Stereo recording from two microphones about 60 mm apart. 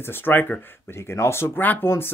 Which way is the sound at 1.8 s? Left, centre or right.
Left.